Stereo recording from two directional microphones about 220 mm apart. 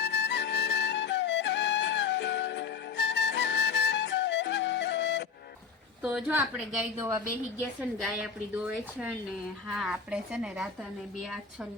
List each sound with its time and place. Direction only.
0.0 s music: 50° left (ahead or behind)
6.0 s a woman's voice: 5° right (ahead or behind)